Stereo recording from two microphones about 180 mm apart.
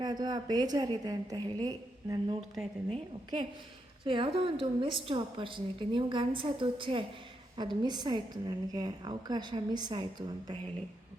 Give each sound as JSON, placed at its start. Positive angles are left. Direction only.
{"t": 0.0, "sound": "a woman's voice", "side_deg": -25}